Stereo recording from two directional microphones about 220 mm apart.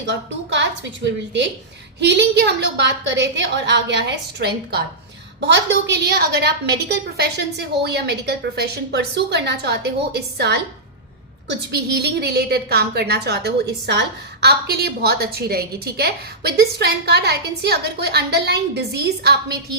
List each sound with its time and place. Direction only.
0.0 s a woman's voice: 55° right (ahead or behind)
2.0 s a woman's voice: 50° right (ahead or behind)